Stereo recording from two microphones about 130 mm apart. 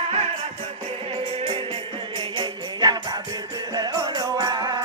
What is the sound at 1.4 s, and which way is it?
Music, 40° right (ahead or behind).